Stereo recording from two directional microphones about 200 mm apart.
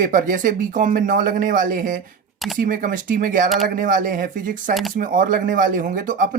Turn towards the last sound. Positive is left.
turn(degrees=-40)  # may be behind; listen again after turning